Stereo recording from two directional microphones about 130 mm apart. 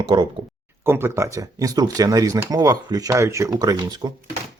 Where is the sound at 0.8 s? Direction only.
20° right (ahead or behind).